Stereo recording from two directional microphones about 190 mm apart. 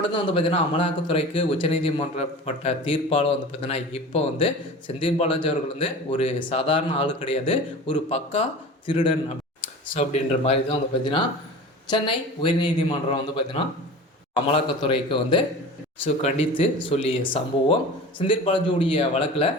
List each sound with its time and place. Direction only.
0.1 s speech: 30° left (ahead or behind)